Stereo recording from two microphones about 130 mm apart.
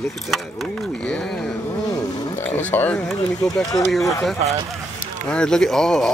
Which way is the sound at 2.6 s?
10° left (ahead or behind).